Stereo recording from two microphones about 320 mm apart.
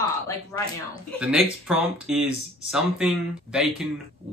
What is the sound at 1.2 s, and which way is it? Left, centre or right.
Speech, centre.